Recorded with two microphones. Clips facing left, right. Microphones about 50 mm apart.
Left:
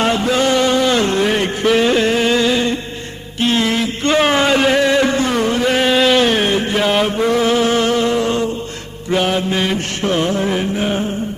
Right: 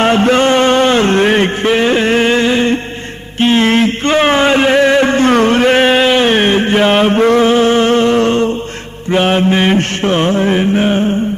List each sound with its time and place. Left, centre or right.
0.0 s a sound: right
9.0 s mantra: right
10.0 s music: right